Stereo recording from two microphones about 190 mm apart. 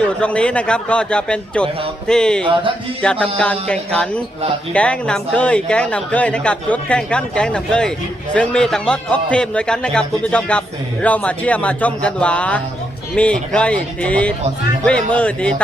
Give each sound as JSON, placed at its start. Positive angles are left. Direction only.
{"t": 0.2, "sound": "a man's voice", "side_deg": 5}
{"t": 2.4, "sound": "a sound", "side_deg": -25}
{"t": 3.0, "sound": "a man's voice", "side_deg": 5}